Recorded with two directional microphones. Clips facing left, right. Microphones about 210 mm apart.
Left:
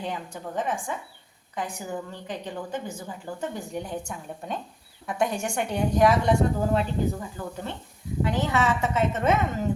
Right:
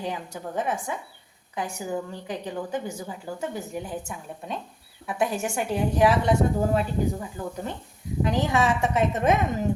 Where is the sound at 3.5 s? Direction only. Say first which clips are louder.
Even; 5° right (ahead or behind).